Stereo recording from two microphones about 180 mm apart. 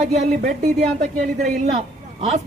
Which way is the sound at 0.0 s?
45° right (ahead or behind).